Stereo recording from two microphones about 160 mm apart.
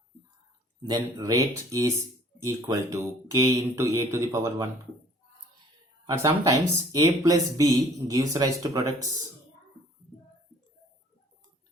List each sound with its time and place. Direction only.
0.8 s speech: 25° right (ahead or behind)
6.1 s speech: 20° right (ahead or behind)